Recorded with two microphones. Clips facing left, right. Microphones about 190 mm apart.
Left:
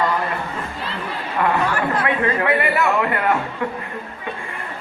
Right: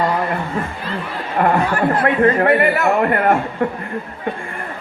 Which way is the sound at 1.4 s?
45° right (ahead or behind).